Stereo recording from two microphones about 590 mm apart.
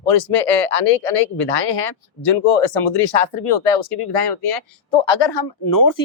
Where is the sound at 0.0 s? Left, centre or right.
Left.